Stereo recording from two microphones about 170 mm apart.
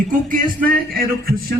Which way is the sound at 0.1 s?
55° right (ahead or behind).